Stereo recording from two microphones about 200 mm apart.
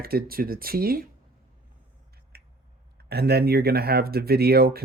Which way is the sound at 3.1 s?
50° right (ahead or behind).